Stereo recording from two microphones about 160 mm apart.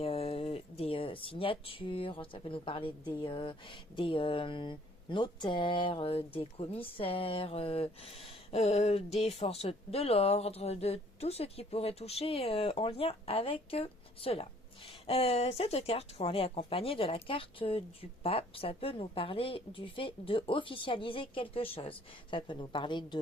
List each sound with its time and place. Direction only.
0.0 s speech: 35° left (ahead or behind)